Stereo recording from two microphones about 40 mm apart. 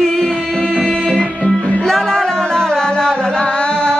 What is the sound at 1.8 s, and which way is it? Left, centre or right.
Music, centre.